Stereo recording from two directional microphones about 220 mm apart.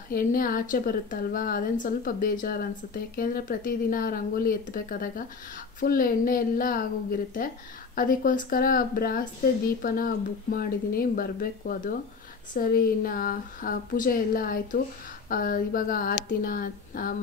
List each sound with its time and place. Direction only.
0.1 s a woman's voice: 40° left (ahead or behind)